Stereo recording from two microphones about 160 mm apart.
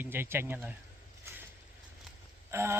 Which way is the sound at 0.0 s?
15° right (ahead or behind).